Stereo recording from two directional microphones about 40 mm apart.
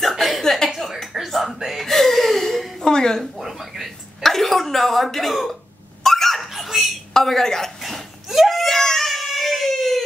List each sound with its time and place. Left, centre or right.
0.0 s a sound: centre
1.0 s music: centre
1.9 s gasp: centre
2.8 s speech: centre
3.2 s a sound: centre
6.0 s giggle: centre
7.2 s a woman's voice: centre
7.8 s screaming: centre